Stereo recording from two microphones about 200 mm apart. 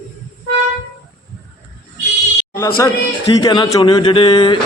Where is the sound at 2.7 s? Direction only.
20° left (ahead or behind).